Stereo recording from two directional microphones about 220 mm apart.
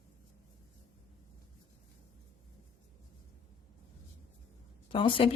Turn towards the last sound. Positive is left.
turn(degrees=25)  # may be behind; listen again after turning